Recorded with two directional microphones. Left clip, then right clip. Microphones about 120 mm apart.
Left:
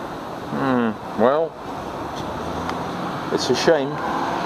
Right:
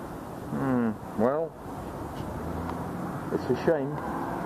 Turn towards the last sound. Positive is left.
turn(degrees=35)  # may be behind; listen again after turning